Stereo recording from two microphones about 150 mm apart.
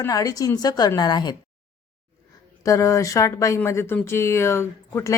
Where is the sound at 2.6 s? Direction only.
20° left (ahead or behind).